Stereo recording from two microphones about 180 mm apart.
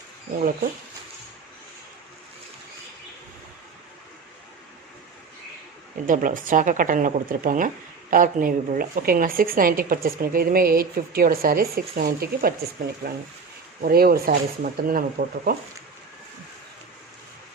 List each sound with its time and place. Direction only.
6.1 s a woman's voice: 45° right (ahead or behind)